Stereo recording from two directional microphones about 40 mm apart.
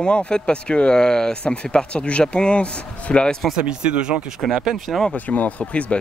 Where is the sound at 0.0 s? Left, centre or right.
Left.